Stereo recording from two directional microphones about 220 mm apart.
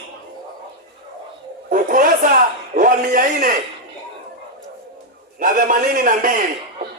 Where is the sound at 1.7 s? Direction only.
40° right (ahead or behind).